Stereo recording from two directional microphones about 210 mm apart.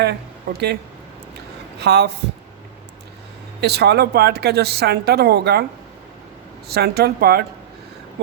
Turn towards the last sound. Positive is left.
turn(degrees=-50)  # may be behind; listen again after turning